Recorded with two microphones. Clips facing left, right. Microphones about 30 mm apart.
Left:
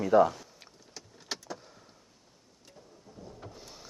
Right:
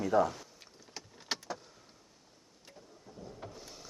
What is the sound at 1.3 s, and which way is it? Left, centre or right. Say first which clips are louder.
Vehicle: right 1 dB; centre.